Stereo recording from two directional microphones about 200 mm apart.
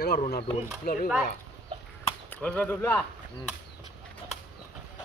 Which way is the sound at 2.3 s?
5° left (ahead or behind).